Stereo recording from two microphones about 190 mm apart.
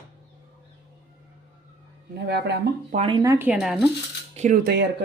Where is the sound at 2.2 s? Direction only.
65° right (ahead or behind).